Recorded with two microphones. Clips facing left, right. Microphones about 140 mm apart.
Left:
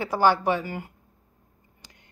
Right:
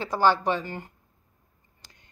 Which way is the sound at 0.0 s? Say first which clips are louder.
Left 1 dB; 10° left (ahead or behind).